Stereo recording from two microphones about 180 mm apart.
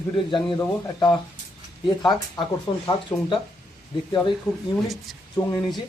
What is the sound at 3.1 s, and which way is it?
Speech, 10° left (ahead or behind).